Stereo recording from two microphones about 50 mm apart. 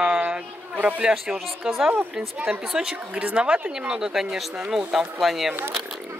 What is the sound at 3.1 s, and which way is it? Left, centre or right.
Speech, right.